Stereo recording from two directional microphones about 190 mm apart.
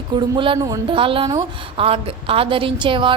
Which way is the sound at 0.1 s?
25° right (ahead or behind).